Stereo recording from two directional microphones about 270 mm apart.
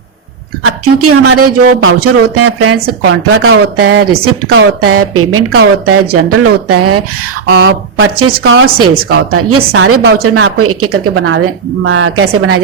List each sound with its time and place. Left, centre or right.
0.6 s speech: right
7.6 s a woman's voice: right